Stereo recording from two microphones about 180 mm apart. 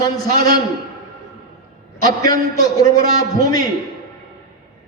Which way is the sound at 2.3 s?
20° left (ahead or behind).